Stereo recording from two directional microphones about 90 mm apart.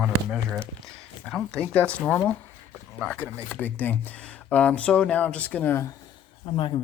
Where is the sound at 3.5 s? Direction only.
20° left (ahead or behind).